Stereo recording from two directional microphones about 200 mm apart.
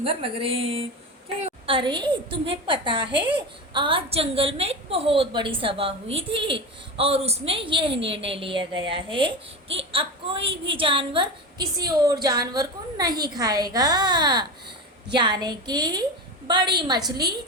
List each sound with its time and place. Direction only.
0.0 s a child's voice: 30° right (ahead or behind)